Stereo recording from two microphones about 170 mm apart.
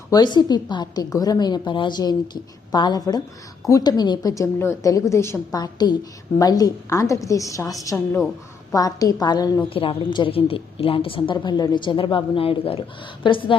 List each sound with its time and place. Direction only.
0.1 s a woman's voice: 25° left (ahead or behind)